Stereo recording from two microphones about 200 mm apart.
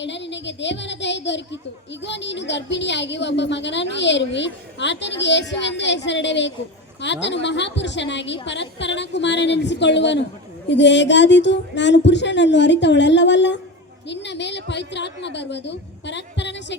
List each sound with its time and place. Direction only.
0.0 s a child's voice: 60° left (ahead or behind)